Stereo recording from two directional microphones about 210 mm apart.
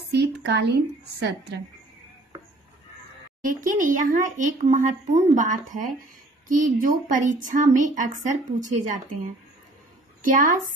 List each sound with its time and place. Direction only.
0.1 s a sound: 50° right (ahead or behind)
1.2 s speech: 50° right (ahead or behind)
3.4 s a woman's voice: 40° right (ahead or behind)
10.2 s a woman's voice: 40° right (ahead or behind)